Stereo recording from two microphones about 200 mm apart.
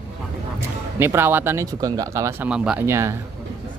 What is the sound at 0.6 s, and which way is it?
Speech, 10° right (ahead or behind).